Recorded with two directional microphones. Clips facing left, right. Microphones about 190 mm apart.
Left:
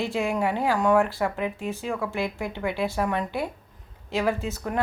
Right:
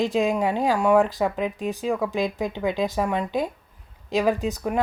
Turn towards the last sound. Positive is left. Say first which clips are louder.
# right 4 dB
turn(degrees=-15)  # may be behind; listen again after turning